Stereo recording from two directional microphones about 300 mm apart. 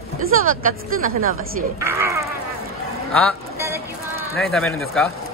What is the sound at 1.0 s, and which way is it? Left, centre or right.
Speech, right.